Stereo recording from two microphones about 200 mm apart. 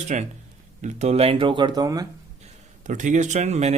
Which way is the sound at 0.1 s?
35° right (ahead or behind).